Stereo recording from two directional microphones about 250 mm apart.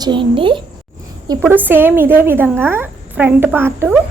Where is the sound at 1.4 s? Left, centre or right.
Centre.